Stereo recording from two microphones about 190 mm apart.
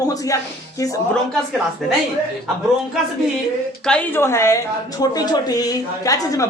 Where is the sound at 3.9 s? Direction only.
10° left (ahead or behind).